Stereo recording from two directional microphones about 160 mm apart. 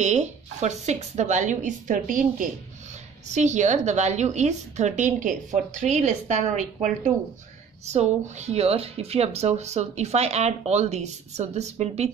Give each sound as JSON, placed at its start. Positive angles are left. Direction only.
{"t": 0.0, "sound": "speech", "side_deg": -45}